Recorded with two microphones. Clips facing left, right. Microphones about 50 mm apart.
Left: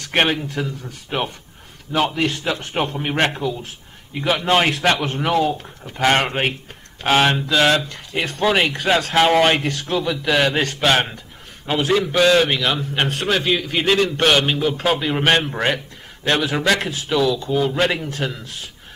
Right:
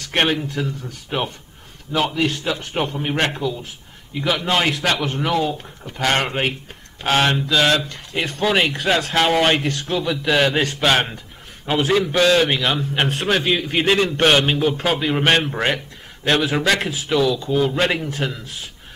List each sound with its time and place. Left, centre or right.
0.1 s a man's voice: centre